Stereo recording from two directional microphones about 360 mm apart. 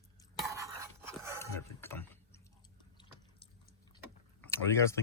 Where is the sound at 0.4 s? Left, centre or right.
Centre.